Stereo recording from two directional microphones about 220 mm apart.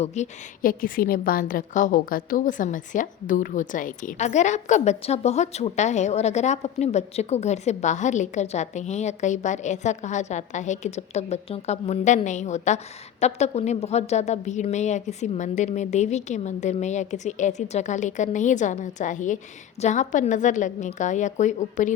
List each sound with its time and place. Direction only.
0.0 s a woman's voice: 30° left (ahead or behind)